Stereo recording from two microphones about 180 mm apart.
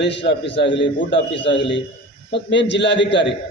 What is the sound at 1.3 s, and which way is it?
Speech, 30° left (ahead or behind).